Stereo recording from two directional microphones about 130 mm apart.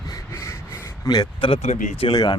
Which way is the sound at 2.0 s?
35° left (ahead or behind).